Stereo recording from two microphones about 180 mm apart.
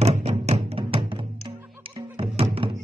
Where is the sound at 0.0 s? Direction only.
35° right (ahead or behind).